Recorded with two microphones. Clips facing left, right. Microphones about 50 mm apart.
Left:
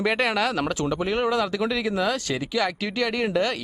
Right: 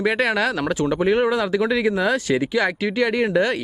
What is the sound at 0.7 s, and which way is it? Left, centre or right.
Speech, centre.